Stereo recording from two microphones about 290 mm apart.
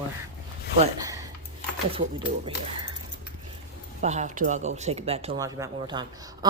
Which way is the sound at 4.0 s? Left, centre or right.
Right.